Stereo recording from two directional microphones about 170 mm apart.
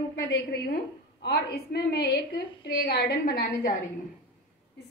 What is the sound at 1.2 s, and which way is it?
A woman's voice, 70° left (ahead or behind).